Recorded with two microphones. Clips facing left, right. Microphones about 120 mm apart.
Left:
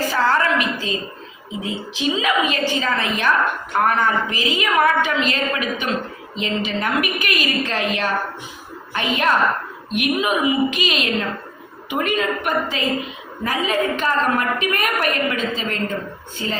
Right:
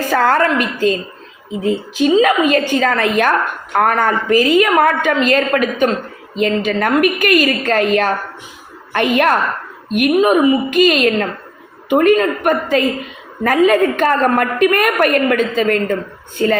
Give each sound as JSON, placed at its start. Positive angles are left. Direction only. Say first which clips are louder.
{"t": 0.1, "sound": "a woman's voice", "louder": "right 7 dB", "side_deg": -50}
{"t": 9.9, "sound": "a woman's voice", "louder": "right 8 dB", "side_deg": -45}